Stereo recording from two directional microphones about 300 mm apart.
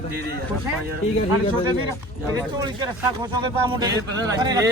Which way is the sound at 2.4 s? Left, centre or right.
Centre.